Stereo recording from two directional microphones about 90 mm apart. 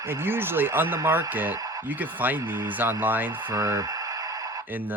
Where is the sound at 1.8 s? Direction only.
20° right (ahead or behind).